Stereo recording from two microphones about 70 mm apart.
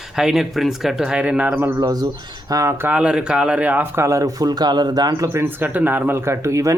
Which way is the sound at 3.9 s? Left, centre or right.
Right.